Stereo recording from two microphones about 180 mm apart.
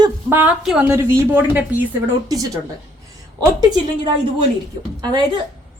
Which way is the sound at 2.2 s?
20° right (ahead or behind).